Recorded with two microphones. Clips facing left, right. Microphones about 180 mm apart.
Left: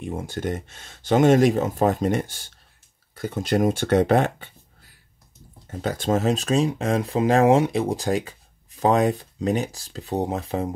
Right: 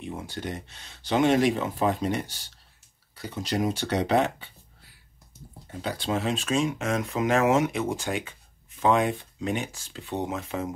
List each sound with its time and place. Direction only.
0.0 s speech: 45° left (ahead or behind)
5.7 s speech: 45° left (ahead or behind)